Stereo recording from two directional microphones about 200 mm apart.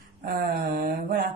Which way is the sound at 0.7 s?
45° right (ahead or behind).